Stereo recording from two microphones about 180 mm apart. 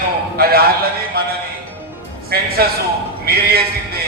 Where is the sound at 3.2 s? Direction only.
60° right (ahead or behind).